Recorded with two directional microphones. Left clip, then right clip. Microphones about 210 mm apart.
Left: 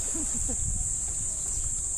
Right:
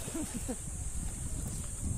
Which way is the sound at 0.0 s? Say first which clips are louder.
Left 7 dB; 25° right (ahead or behind).